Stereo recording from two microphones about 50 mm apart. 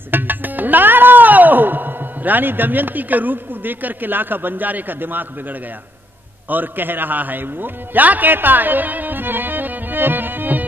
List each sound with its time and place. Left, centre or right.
0.1 s music: right
6.5 s a man's voice: right